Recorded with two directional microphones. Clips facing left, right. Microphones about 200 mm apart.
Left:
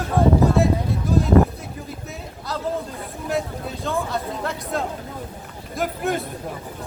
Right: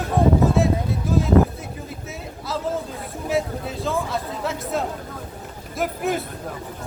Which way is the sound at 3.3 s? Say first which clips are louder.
Right 2 dB; centre (ahead or behind).